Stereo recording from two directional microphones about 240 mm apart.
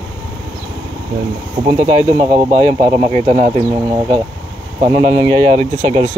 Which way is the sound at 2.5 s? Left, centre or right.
Right.